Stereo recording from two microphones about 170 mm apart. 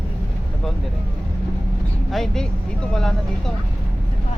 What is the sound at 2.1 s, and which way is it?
Vehicle, centre (ahead or behind).